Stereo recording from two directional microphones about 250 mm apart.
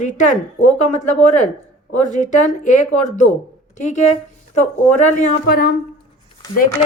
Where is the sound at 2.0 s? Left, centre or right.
Left.